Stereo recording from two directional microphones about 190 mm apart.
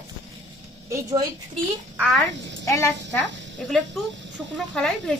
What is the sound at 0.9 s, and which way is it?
Speech, 20° right (ahead or behind).